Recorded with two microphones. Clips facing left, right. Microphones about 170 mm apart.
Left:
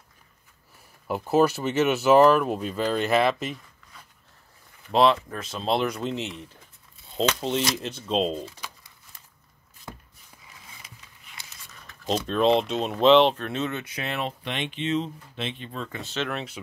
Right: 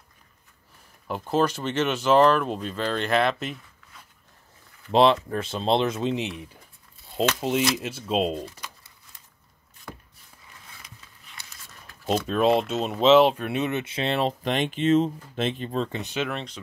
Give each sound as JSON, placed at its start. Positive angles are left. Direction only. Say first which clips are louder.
{"t": 1.0, "sound": "speech", "louder": "left 3 dB", "side_deg": 10}
{"t": 4.9, "sound": "speech", "louder": "right 2 dB", "side_deg": -25}
{"t": 12.1, "sound": "speech", "louder": "even", "side_deg": -5}
{"t": 16.0, "sound": "speech", "louder": "right 2 dB", "side_deg": -15}
{"t": 16.3, "sound": "speech", "louder": "even", "side_deg": 5}